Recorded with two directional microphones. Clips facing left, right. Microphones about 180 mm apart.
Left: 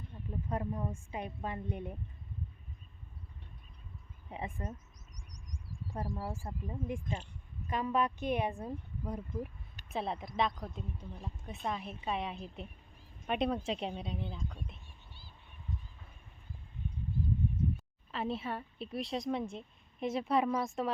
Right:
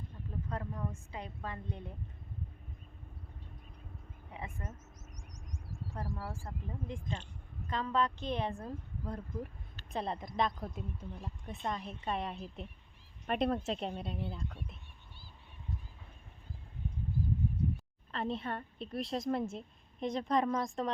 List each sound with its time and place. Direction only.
0.4 s a woman's voice: 20° left (ahead or behind)
4.3 s a sound: 25° left (ahead or behind)
5.9 s a woman's voice: 15° left (ahead or behind); by 14.6 s centre (ahead or behind)
18.1 s a woman's voice: 5° left (ahead or behind)